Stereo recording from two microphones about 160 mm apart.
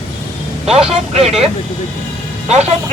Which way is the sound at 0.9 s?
40° right (ahead or behind).